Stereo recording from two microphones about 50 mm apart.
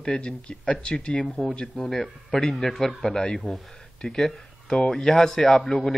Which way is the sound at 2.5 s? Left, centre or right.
Centre.